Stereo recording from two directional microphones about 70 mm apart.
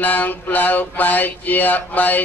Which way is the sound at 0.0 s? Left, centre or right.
Left.